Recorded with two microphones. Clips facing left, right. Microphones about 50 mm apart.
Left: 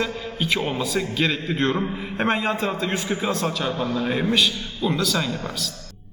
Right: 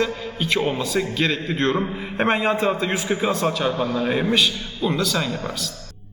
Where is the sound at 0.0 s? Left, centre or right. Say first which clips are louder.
Right 2 dB; centre.